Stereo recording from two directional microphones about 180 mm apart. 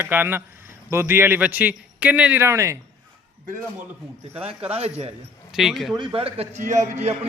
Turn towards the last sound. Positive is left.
turn(degrees=-40)  # may be behind; listen again after turning